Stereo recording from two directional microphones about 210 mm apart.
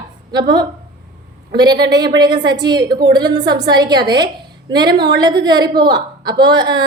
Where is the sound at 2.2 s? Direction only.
20° right (ahead or behind).